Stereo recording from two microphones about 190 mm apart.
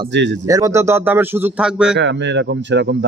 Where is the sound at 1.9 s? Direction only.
70° right (ahead or behind).